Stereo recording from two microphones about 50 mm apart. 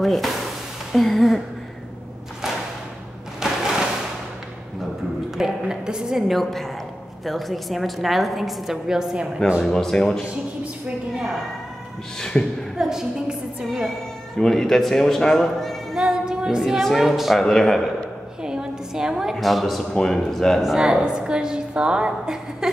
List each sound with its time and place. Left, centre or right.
0.0 s a woman's voice: centre
0.9 s a sound: centre
3.3 s a sound: centre
5.4 s a sound: centre
6.1 s a woman's voice: centre
9.7 s a woman's voice: centre
12.2 s speech: centre
12.7 s a woman's voice: centre
13.7 s speech: centre
16.0 s speech: centre
17.4 s speech: centre
18.4 s a sound: centre
19.3 s a woman's voice: centre
20.6 s a woman's voice: centre